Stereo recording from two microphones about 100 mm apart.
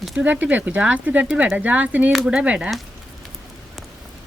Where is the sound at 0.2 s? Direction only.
15° right (ahead or behind).